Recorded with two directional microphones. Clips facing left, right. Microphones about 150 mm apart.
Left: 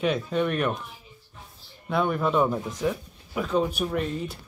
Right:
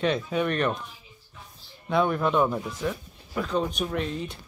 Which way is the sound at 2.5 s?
15° left (ahead or behind).